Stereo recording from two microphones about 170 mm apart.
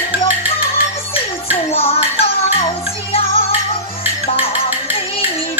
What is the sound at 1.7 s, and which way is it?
Music, 35° left (ahead or behind).